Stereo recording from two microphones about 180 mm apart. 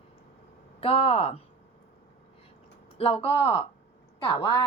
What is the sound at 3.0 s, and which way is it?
A woman's voice, 30° left (ahead or behind).